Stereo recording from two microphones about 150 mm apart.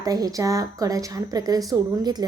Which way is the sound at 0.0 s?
25° right (ahead or behind).